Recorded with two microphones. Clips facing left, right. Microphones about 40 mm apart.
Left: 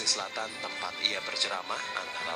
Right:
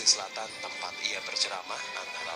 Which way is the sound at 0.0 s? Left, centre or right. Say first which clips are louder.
Even; left.